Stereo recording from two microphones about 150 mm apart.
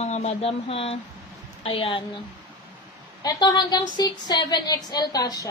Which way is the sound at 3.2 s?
30° left (ahead or behind).